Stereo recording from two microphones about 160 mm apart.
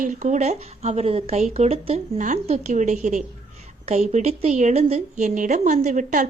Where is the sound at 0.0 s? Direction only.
50° right (ahead or behind).